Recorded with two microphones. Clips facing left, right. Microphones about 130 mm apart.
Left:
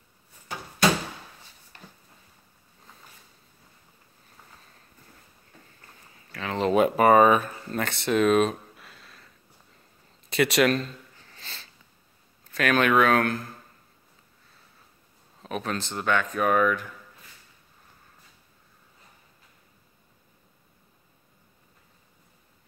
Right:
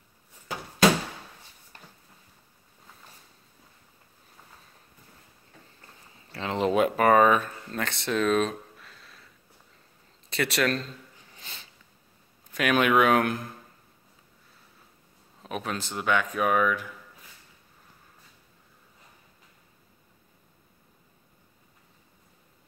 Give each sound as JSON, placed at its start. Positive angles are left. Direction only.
{"t": 6.3, "sound": "speech", "side_deg": -25}
{"t": 6.7, "sound": "a sound", "side_deg": 5}
{"t": 10.3, "sound": "speech", "side_deg": 15}
{"t": 11.1, "sound": "a sound", "side_deg": -15}
{"t": 12.4, "sound": "speech", "side_deg": -10}
{"t": 15.4, "sound": "speech", "side_deg": -5}